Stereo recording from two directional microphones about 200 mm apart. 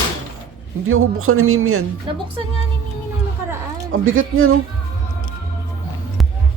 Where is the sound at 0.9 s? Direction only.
90° right.